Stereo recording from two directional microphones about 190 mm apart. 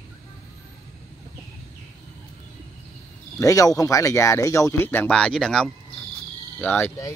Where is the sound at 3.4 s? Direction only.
15° left (ahead or behind).